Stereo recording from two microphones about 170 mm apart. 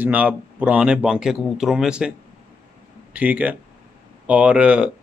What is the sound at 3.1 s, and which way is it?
Speech, 10° right (ahead or behind).